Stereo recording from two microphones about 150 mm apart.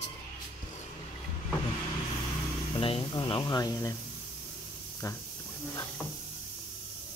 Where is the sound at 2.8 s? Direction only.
35° left (ahead or behind).